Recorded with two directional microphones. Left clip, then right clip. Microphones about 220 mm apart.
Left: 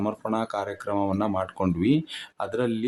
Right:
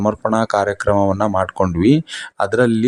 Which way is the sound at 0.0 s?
30° right (ahead or behind).